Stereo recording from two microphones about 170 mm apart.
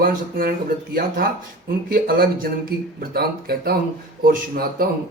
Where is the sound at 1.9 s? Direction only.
60° right (ahead or behind).